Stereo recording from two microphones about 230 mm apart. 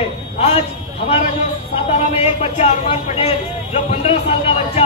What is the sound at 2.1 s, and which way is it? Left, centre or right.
Speech, left.